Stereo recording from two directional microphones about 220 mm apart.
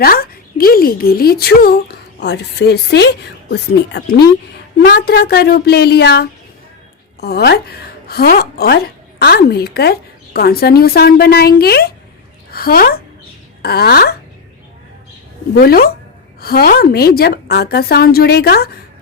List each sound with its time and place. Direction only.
0.0 s a woman's voice: 40° left (ahead or behind)
15.5 s a woman's voice: 45° left (ahead or behind)